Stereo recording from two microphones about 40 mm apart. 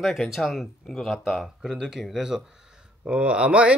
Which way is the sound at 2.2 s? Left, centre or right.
Centre.